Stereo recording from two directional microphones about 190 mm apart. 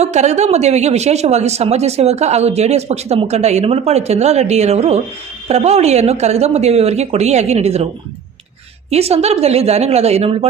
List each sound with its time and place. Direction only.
0.0 s speech: 35° right (ahead or behind)
8.9 s speech: 30° right (ahead or behind)